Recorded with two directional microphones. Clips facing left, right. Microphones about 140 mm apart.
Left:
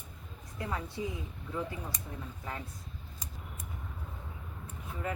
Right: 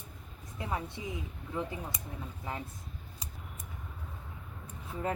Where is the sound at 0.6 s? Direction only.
20° right (ahead or behind).